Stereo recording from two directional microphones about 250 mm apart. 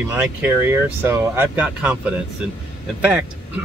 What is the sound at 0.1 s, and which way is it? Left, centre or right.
Speech, centre.